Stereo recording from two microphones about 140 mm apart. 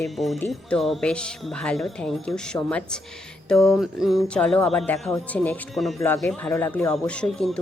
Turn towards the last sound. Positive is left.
turn(degrees=5)  # may be behind; listen again after turning